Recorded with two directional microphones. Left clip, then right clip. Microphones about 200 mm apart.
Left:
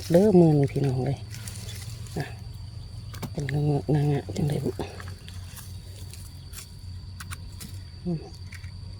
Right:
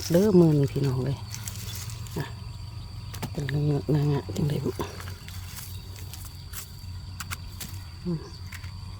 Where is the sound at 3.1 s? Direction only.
5° right (ahead or behind).